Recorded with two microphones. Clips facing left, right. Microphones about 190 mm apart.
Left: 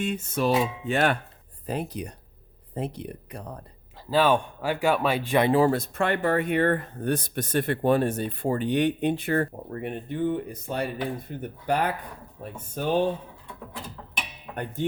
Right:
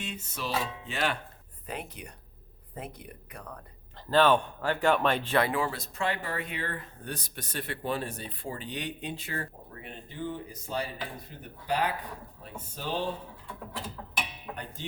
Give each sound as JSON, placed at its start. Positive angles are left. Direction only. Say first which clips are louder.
{"t": 0.0, "sound": "speech", "louder": "left 11 dB", "side_deg": 50}
{"t": 1.6, "sound": "speech", "louder": "left 9 dB", "side_deg": 35}
{"t": 4.1, "sound": "speech", "louder": "left 1 dB", "side_deg": 10}
{"t": 5.5, "sound": "speech", "louder": "left 10 dB", "side_deg": 35}
{"t": 5.7, "sound": "speech", "louder": "left 7 dB", "side_deg": 55}
{"t": 14.5, "sound": "speech", "louder": "left 14 dB", "side_deg": 55}